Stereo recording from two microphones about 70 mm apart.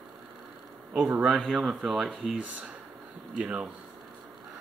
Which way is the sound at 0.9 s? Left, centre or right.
Centre.